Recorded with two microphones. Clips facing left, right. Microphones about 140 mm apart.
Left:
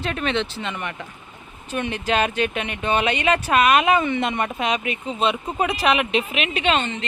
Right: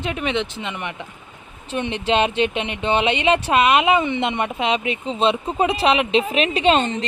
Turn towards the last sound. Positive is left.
turn(degrees=-35)  # may be behind; listen again after turning